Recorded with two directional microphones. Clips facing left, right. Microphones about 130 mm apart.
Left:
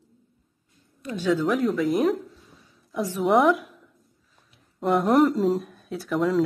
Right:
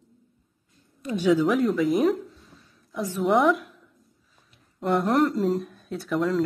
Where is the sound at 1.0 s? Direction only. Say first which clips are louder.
Right 3 dB; 20° right (ahead or behind).